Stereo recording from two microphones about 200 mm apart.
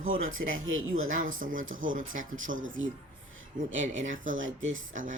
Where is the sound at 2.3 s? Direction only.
75° right (ahead or behind).